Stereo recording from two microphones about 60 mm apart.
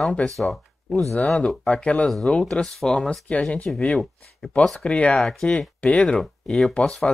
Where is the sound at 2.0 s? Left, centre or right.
Centre.